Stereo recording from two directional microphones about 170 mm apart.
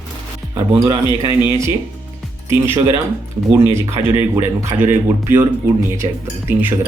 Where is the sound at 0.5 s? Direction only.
25° right (ahead or behind).